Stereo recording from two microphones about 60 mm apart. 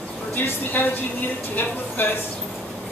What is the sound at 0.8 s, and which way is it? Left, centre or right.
Speech, left.